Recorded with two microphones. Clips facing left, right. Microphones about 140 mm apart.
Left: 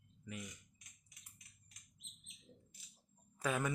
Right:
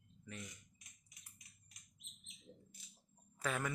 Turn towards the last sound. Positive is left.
turn(degrees=15)  # may be behind; listen again after turning